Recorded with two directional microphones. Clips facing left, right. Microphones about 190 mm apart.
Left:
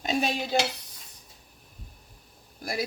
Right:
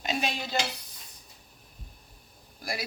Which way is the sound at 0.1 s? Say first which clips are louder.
Left 4 dB; 40° left (ahead or behind).